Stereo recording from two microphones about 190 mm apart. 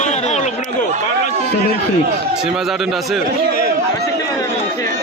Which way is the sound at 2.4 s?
Centre (ahead or behind).